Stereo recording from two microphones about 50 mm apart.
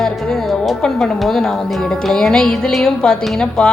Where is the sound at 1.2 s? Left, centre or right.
Centre.